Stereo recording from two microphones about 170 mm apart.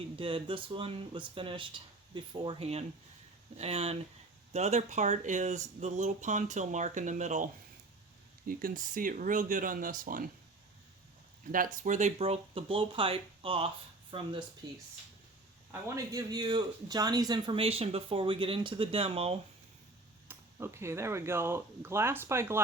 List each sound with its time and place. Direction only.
0.0 s speech: 30° right (ahead or behind)
8.4 s speech: 55° right (ahead or behind)
11.5 s speech: 55° right (ahead or behind); by 19.4 s 35° right (ahead or behind)
20.2 s speech: 15° right (ahead or behind)